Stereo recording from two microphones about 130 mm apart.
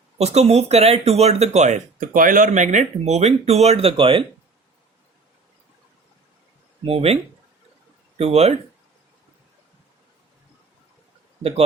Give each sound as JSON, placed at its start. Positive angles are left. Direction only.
{"t": 0.2, "sound": "speech", "side_deg": -55}
{"t": 6.8, "sound": "speech", "side_deg": -50}
{"t": 8.2, "sound": "speech", "side_deg": -50}